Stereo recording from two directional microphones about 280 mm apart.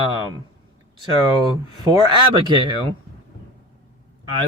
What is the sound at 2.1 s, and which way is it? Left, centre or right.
Speech, centre.